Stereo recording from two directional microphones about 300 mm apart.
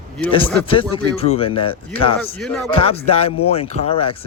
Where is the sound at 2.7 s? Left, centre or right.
Centre.